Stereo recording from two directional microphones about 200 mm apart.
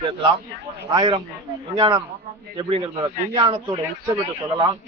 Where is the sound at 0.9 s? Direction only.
20° right (ahead or behind).